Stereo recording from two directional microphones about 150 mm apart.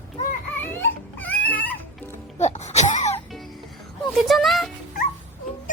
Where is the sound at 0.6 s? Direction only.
10° left (ahead or behind).